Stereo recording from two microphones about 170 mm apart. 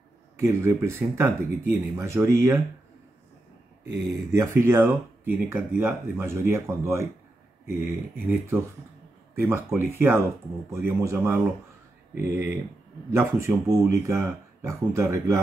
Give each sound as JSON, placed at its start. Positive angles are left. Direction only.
{"t": 0.4, "sound": "speech", "side_deg": -15}
{"t": 4.3, "sound": "speech", "side_deg": -15}